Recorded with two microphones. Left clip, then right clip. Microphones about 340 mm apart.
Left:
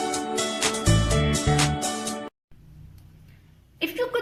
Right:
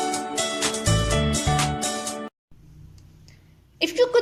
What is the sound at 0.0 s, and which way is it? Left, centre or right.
Music, right.